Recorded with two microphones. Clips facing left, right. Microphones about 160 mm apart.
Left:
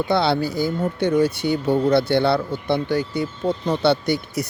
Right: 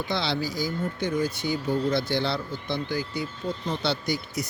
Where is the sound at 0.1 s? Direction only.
55° left (ahead or behind).